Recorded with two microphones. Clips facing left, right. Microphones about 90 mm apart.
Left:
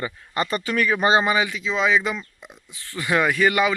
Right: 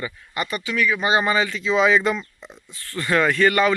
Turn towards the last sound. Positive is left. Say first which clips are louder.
# right 1 dB
turn(degrees=10)  # may be behind; listen again after turning